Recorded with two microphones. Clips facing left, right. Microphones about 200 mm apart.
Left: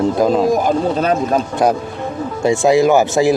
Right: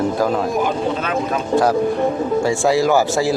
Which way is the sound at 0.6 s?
40° left (ahead or behind).